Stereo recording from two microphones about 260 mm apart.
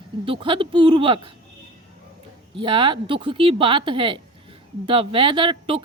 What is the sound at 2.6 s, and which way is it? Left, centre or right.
Speech, centre.